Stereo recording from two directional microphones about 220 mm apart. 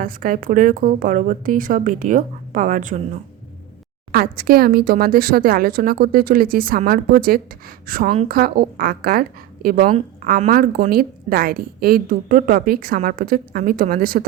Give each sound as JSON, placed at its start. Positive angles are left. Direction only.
{"t": 0.0, "sound": "a woman's voice", "side_deg": -40}
{"t": 4.1, "sound": "a woman's voice", "side_deg": -40}